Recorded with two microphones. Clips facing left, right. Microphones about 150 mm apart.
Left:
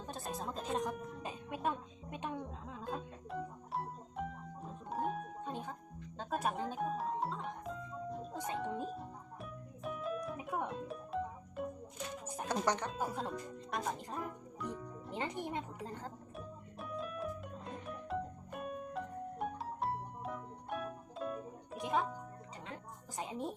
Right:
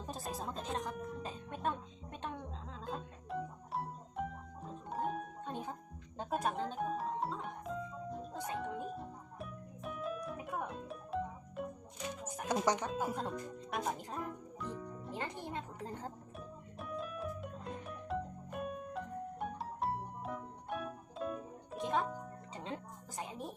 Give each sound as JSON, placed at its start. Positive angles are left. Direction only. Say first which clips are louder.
{"t": 0.0, "sound": "music", "louder": "even", "side_deg": -5}
{"t": 2.8, "sound": "music", "louder": "left 1 dB", "side_deg": 0}
{"t": 12.5, "sound": "speech", "louder": "right 2 dB", "side_deg": -10}
{"t": 13.1, "sound": "speech", "louder": "right 1 dB", "side_deg": 0}
{"t": 14.8, "sound": "music", "louder": "right 2 dB", "side_deg": 0}
{"t": 15.1, "sound": "music", "louder": "left 3 dB", "side_deg": 20}
{"t": 16.7, "sound": "music", "louder": "even", "side_deg": 0}
{"t": 21.8, "sound": "music", "louder": "even", "side_deg": 10}
{"t": 23.1, "sound": "music", "louder": "left 3 dB", "side_deg": 20}